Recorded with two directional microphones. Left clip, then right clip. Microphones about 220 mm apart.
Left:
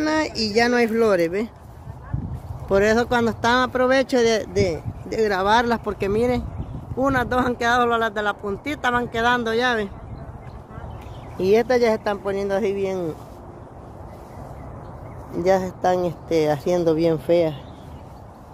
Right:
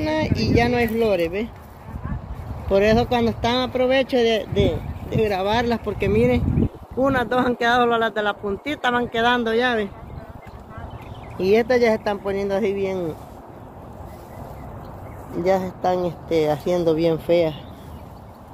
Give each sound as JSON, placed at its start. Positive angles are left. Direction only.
{"t": 0.2, "sound": "speech", "side_deg": 25}
{"t": 1.1, "sound": "speech", "side_deg": 70}
{"t": 2.7, "sound": "speech", "side_deg": 20}
{"t": 4.6, "sound": "speech", "side_deg": 70}
{"t": 5.3, "sound": "speech", "side_deg": 20}
{"t": 11.3, "sound": "speech", "side_deg": 15}
{"t": 15.4, "sound": "speech", "side_deg": 20}